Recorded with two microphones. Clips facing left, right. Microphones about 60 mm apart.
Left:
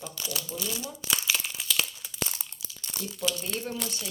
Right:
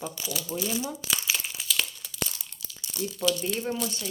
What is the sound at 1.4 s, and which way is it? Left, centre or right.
Crumpling, centre.